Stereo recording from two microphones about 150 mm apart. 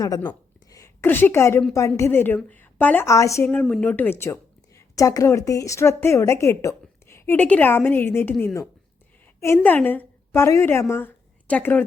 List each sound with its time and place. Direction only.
0.0 s a sound: 25° left (ahead or behind)
1.0 s a woman's voice: 15° left (ahead or behind)
3.5 s a woman's voice: 5° left (ahead or behind)